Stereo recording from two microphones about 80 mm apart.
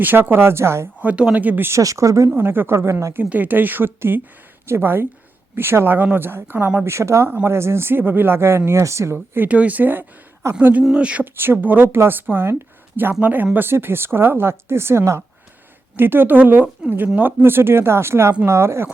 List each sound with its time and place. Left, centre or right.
0.0 s speech: right
1.0 s speech: centre
1.8 s speech: right
2.3 s speech: right
3.2 s speech: right
9.1 s speech: right